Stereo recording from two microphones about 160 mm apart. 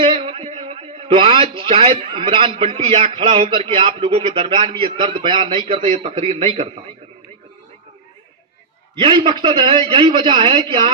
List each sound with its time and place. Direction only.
0.0 s a man's voice: 35° right (ahead or behind)
9.0 s a man's voice: 30° right (ahead or behind)